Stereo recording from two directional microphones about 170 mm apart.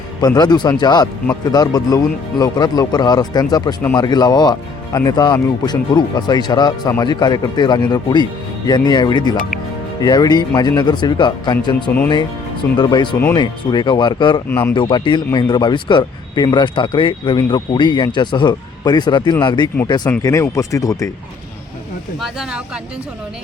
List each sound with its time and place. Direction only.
0.2 s speech: 25° left (ahead or behind)
14.5 s speech: 10° left (ahead or behind)
14.8 s speech: 25° left (ahead or behind)
20.1 s speech: 15° left (ahead or behind)
22.2 s speech: centre (ahead or behind)